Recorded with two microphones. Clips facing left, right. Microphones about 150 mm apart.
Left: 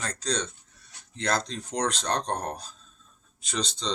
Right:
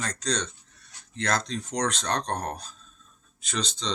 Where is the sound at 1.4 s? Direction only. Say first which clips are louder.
Right 1 dB; 35° left (ahead or behind).